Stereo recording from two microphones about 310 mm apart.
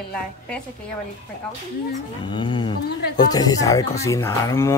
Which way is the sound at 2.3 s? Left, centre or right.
Centre.